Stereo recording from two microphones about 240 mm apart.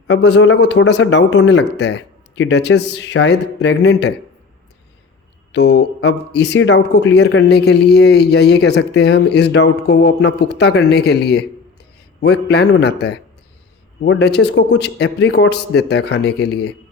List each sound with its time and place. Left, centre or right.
0.1 s a man's voice: left
5.5 s a man's voice: left